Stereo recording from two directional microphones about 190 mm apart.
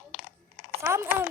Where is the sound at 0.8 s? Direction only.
15° right (ahead or behind).